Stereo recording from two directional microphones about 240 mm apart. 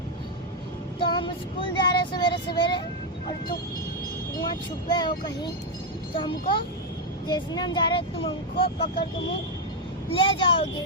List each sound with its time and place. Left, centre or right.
0.9 s vehicle: left
1.7 s child singing: centre
4.9 s speech: centre
7.3 s speech: centre
10.1 s speech: left